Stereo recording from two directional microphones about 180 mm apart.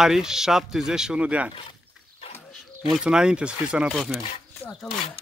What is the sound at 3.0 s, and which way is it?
Speech, 5° right (ahead or behind).